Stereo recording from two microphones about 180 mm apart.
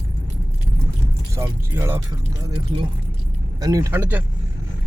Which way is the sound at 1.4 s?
15° right (ahead or behind).